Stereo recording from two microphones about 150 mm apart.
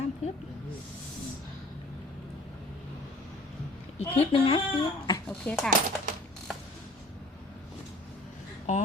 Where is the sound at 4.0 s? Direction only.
40° left (ahead or behind).